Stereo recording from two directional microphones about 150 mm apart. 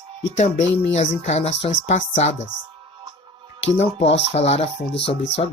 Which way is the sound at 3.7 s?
45° left (ahead or behind).